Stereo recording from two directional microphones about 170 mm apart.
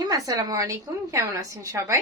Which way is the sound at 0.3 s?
20° right (ahead or behind).